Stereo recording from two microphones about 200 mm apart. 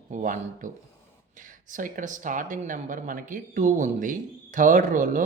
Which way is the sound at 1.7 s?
40° right (ahead or behind).